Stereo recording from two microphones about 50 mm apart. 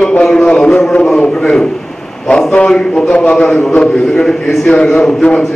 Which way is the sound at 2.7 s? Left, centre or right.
Centre.